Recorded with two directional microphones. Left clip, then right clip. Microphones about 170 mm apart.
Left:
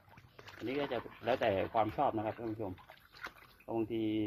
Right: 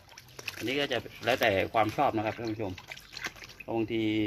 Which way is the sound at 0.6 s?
5° left (ahead or behind).